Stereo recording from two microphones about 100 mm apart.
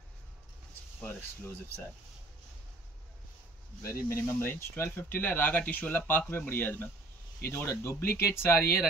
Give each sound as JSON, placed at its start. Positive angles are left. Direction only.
{"t": 1.0, "sound": "speech", "side_deg": 20}
{"t": 3.8, "sound": "speech", "side_deg": 25}